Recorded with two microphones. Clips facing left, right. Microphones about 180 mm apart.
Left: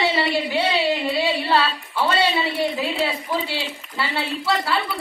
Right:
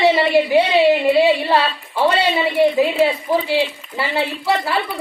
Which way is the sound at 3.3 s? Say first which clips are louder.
Right 6 dB; 30° right (ahead or behind).